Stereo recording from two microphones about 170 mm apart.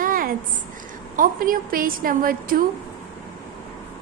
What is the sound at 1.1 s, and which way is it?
A woman's voice, 55° right (ahead or behind).